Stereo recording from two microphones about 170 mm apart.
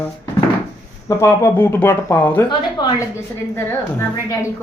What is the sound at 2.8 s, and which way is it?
A woman's voice, 25° left (ahead or behind).